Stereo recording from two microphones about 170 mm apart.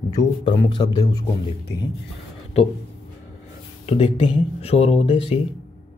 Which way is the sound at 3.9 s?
35° left (ahead or behind).